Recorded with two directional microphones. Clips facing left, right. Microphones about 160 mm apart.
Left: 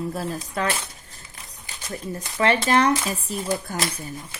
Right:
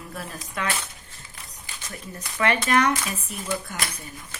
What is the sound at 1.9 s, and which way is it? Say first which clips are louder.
Speech: left 8 dB; 30° left (ahead or behind).